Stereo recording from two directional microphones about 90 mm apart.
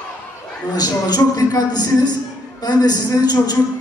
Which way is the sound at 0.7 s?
45° left (ahead or behind).